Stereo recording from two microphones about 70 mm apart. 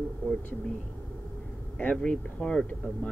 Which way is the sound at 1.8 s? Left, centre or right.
Centre.